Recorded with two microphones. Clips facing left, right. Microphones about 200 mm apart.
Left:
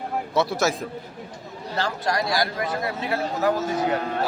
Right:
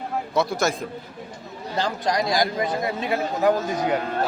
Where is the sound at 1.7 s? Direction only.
15° right (ahead or behind).